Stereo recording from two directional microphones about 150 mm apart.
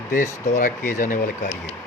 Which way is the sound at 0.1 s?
60° left (ahead or behind).